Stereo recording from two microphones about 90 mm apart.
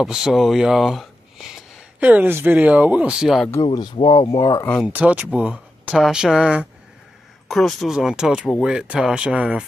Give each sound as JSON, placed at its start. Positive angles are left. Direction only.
{"t": 0.0, "sound": "speech", "side_deg": -5}
{"t": 2.0, "sound": "speech", "side_deg": -15}
{"t": 3.9, "sound": "speech", "side_deg": 65}
{"t": 4.8, "sound": "speech", "side_deg": -15}
{"t": 7.4, "sound": "speech", "side_deg": 5}
{"t": 8.7, "sound": "speech", "side_deg": -10}